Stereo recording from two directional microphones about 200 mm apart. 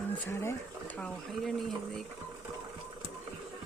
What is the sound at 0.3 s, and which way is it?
Speech, 10° left (ahead or behind).